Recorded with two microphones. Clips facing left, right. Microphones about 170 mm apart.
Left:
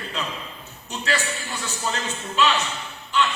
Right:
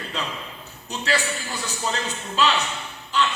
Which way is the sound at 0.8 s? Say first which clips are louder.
Right 1 dB; 35° right (ahead or behind).